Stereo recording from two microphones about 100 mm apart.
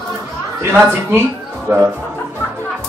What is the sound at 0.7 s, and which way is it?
Speech, 20° right (ahead or behind).